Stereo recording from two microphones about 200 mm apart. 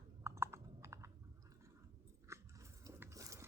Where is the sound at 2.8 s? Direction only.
15° right (ahead or behind).